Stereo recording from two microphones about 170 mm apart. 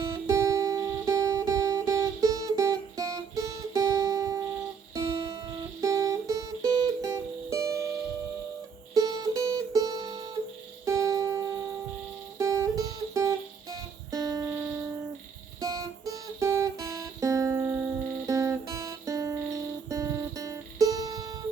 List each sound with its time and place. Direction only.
0.0 s music: 20° right (ahead or behind)
9.0 s music: 20° right (ahead or behind)
15.6 s music: 20° right (ahead or behind)